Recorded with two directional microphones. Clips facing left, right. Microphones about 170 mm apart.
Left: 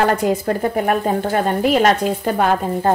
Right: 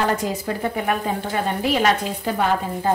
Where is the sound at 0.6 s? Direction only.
45° left (ahead or behind).